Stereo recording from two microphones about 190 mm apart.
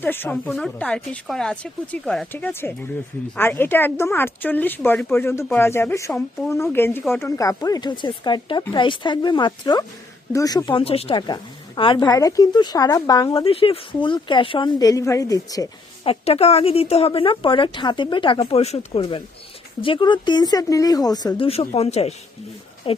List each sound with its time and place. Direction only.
0.0 s speech: 10° left (ahead or behind)
13.4 s speech: 30° left (ahead or behind)
16.0 s speech: 30° left (ahead or behind)